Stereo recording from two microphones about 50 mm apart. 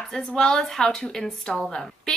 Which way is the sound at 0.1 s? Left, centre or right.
Centre.